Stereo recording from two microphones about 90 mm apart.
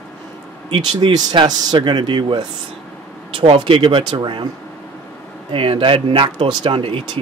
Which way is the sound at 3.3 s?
75° right (ahead or behind).